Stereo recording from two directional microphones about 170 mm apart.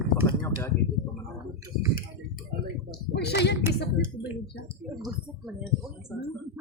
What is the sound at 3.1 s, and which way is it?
Speech, 75° left (ahead or behind).